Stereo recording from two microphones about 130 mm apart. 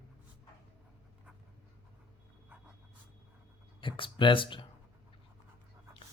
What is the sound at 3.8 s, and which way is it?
Speech, 40° left (ahead or behind).